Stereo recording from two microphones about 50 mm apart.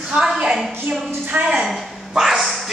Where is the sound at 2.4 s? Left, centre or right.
Centre.